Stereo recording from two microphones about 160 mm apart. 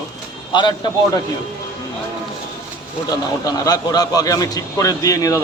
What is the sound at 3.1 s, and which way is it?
A man's voice, 25° left (ahead or behind).